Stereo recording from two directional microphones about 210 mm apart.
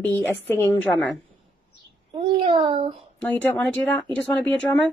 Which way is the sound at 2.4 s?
25° right (ahead or behind).